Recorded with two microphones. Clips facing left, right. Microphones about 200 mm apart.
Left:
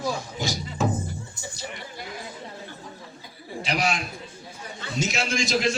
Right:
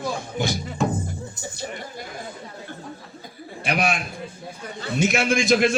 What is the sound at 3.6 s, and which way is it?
A man's voice, 55° right (ahead or behind).